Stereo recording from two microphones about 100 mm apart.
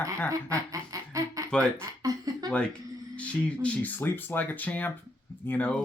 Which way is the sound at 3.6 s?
15° left (ahead or behind).